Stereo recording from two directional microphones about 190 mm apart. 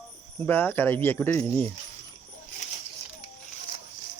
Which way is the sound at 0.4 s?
10° left (ahead or behind).